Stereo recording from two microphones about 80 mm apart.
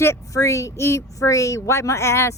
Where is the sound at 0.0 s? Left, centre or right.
Left.